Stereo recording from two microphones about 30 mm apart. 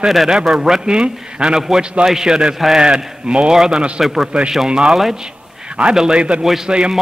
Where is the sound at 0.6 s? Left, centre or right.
Centre.